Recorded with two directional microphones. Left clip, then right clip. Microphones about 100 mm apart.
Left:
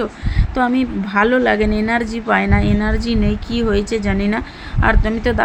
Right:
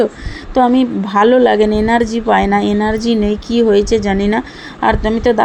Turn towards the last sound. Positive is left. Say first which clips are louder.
# right 5 dB
turn(degrees=-30)  # may be behind; listen again after turning